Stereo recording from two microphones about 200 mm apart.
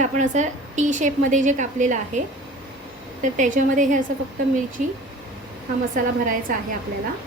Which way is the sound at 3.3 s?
40° right (ahead or behind).